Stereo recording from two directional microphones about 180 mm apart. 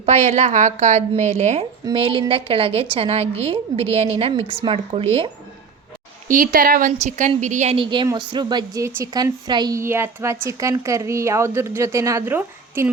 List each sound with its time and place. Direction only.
0.0 s a woman's voice: 40° right (ahead or behind)
6.2 s a woman's voice: 50° right (ahead or behind); by 12.9 s 10° right (ahead or behind)